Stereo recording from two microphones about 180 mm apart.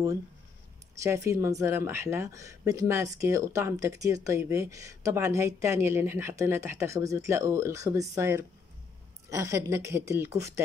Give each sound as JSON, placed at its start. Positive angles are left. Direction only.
{"t": 1.0, "sound": "speech", "side_deg": -15}